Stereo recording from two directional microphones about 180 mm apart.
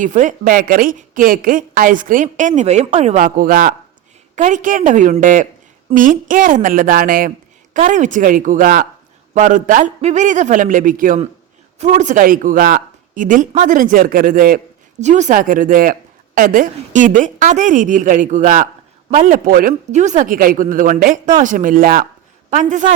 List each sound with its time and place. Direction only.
0.0 s a woman's voice: 45° right (ahead or behind)
15.0 s a woman's voice: 40° right (ahead or behind)